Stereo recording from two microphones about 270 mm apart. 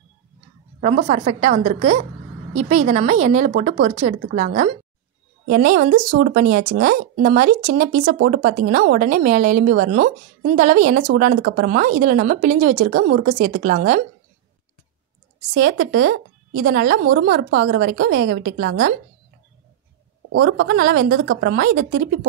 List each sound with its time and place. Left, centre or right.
0.7 s speech: right
15.5 s speech: right
20.3 s a woman's voice: right
20.6 s speech: right
21.1 s speech: right